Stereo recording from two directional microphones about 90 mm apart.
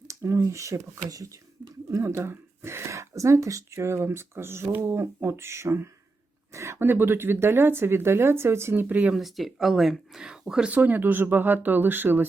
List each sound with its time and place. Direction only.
0.1 s speech: 35° right (ahead or behind); by 9.1 s 15° right (ahead or behind)
9.1 s speech: centre (ahead or behind)
10.7 s speech: 20° right (ahead or behind)